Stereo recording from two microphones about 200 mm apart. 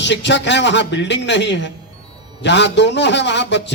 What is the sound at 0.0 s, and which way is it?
A man's voice, 60° left (ahead or behind).